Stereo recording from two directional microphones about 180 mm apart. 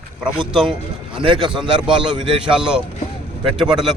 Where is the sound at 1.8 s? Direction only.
5° right (ahead or behind).